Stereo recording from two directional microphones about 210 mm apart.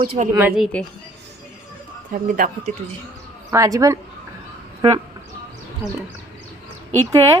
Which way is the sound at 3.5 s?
15° right (ahead or behind).